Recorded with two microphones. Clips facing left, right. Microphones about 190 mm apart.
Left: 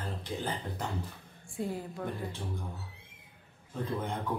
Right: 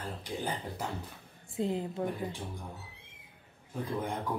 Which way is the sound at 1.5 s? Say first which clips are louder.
Right 4 dB; 20° right (ahead or behind).